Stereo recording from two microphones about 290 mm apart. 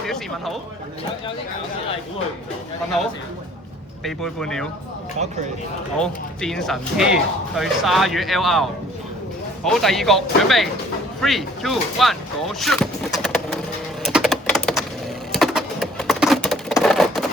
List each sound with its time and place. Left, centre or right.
4.0 s speech: centre
6.0 s speech: centre
9.6 s speech: centre
14.0 s typing: centre
15.3 s a sound: centre